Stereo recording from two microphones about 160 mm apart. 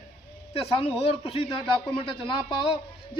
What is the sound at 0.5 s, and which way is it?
Speech, 35° left (ahead or behind).